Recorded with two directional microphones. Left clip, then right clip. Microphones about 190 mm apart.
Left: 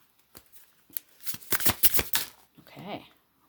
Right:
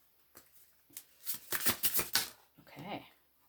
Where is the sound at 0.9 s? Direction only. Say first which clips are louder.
Left 5 dB; 50° left (ahead or behind).